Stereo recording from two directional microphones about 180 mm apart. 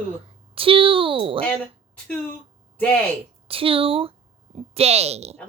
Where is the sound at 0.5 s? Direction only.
30° right (ahead or behind).